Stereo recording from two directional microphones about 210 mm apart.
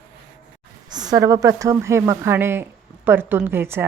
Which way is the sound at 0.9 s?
20° right (ahead or behind).